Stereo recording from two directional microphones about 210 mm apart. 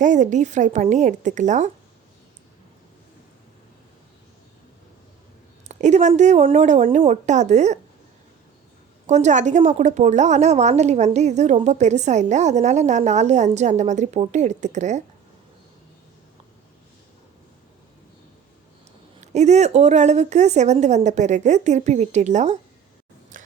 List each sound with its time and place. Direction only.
0.0 s a woman's voice: 35° right (ahead or behind)
5.6 s a woman's voice: 35° right (ahead or behind)
9.0 s a woman's voice: 35° right (ahead or behind)
19.2 s a woman's voice: 35° right (ahead or behind)
23.3 s a sound: 40° right (ahead or behind)